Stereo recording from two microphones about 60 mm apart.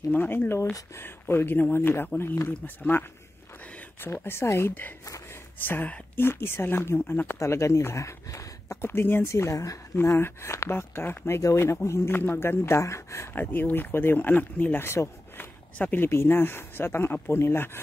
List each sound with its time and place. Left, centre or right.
0.1 s speech: left
4.0 s speech: left
5.0 s gasp: left
5.6 s speech: left
7.3 s speech: left
8.8 s speech: left
9.3 s speech: left
10.0 s speech: left
12.1 s speech: left
13.3 s speech: left
15.8 s speech: left